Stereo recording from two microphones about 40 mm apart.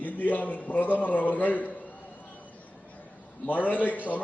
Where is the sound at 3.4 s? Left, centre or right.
Left.